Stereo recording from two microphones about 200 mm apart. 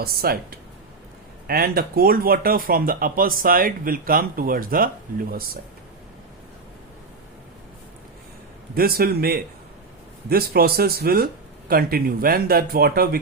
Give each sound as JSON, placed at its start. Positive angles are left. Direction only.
{"t": 0.0, "sound": "speech", "side_deg": -50}
{"t": 8.7, "sound": "speech", "side_deg": -50}